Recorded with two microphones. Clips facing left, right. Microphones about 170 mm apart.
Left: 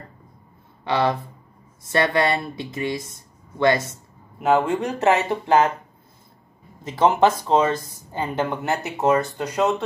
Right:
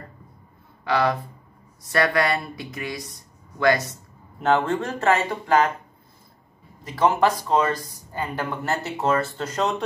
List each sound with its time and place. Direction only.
0.8 s speech: 25° left (ahead or behind)
4.4 s speech: 10° left (ahead or behind)
6.8 s speech: 25° left (ahead or behind); by 9.8 s 5° left (ahead or behind)